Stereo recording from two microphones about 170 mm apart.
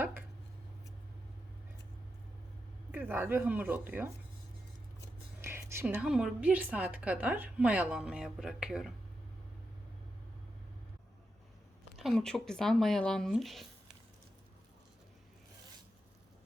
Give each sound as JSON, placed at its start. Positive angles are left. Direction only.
{"t": 0.0, "sound": "a sound", "side_deg": -15}
{"t": 2.9, "sound": "a woman's voice", "side_deg": -10}
{"t": 5.4, "sound": "a woman's voice", "side_deg": -15}
{"t": 11.9, "sound": "speech", "side_deg": 0}